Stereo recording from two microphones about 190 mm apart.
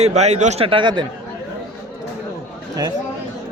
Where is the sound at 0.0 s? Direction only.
35° right (ahead or behind).